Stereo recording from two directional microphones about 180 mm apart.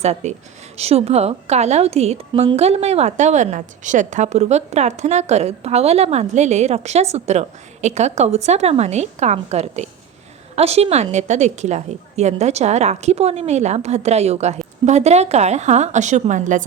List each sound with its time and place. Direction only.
0.0 s a woman's voice: 40° right (ahead or behind)